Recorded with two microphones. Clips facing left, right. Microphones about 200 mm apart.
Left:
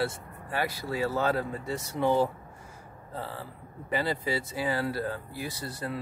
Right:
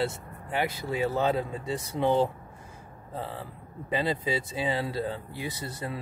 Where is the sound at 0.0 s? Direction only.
20° right (ahead or behind).